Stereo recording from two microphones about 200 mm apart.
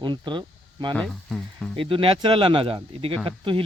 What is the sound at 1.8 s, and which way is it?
Speech, 25° right (ahead or behind).